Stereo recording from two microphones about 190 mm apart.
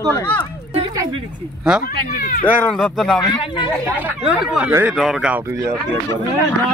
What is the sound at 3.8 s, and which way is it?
Speech, 10° right (ahead or behind).